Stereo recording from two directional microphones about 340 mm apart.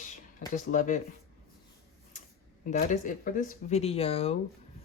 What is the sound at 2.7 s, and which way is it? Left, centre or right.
Speech, left.